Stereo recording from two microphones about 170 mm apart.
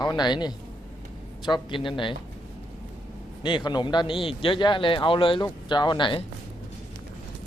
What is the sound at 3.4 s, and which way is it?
Speech, 25° left (ahead or behind).